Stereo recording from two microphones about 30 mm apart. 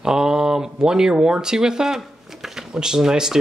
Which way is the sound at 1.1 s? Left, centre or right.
Right.